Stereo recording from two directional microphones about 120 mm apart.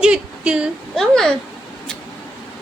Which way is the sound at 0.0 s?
10° right (ahead or behind).